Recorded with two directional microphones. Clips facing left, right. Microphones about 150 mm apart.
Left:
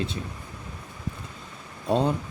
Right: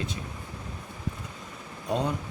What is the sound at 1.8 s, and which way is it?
Speech, 30° left (ahead or behind).